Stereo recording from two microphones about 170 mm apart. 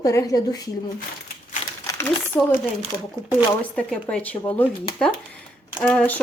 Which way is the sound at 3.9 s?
5° left (ahead or behind).